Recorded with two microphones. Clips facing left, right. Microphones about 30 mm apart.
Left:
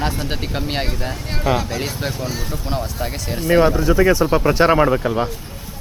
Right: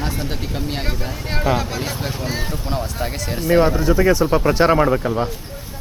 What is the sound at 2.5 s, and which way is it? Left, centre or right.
A man's voice, centre.